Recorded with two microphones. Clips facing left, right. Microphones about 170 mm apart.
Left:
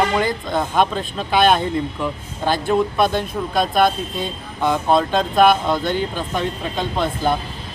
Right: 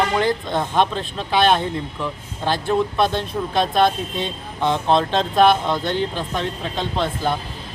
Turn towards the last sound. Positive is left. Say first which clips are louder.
# left 2 dB
turn(degrees=10)  # may be behind; listen again after turning